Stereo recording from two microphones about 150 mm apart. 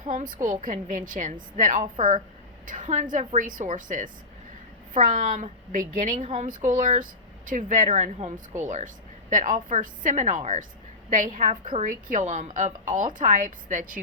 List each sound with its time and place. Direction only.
0.1 s a woman's voice: 60° right (ahead or behind)